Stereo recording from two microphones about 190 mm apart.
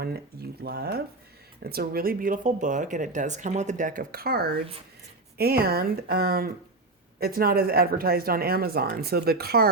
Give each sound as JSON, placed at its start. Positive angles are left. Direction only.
{"t": 0.6, "sound": "speech", "side_deg": -55}